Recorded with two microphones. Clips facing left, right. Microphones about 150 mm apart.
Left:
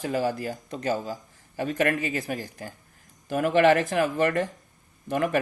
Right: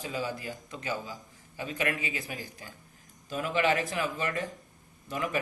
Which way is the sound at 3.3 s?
60° left (ahead or behind).